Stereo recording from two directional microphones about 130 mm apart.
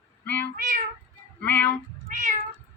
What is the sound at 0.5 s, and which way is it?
Cat, 85° right.